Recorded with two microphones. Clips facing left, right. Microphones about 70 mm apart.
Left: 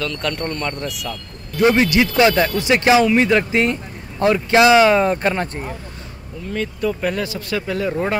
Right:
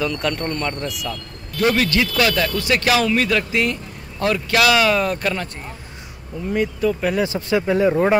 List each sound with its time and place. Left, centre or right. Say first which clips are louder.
0.0 s speech: right 1 dB; centre
1.6 s speech: left 3 dB; left
6.8 s speech: left 2 dB; centre
7.2 s speech: right 4 dB; right